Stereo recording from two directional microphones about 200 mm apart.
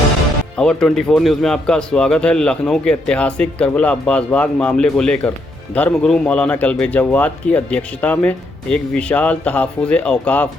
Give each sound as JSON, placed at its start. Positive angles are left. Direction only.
{"t": 0.5, "sound": "speech", "side_deg": 5}